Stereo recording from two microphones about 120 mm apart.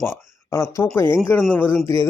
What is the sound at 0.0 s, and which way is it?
Speech, 25° left (ahead or behind).